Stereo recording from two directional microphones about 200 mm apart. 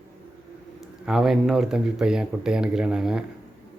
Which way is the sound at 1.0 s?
Centre (ahead or behind).